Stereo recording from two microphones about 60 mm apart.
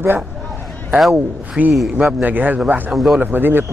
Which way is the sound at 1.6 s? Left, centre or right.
Right.